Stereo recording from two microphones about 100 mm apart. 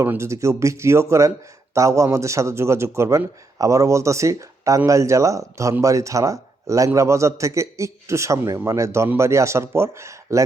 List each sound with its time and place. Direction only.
0.0 s a man's voice: 25° right (ahead or behind)